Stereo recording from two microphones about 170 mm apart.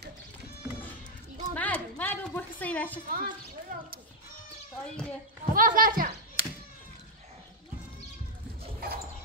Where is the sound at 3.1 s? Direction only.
60° right (ahead or behind).